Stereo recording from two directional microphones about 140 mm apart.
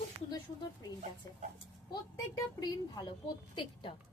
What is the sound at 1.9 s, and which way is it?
A woman's voice, 25° left (ahead or behind).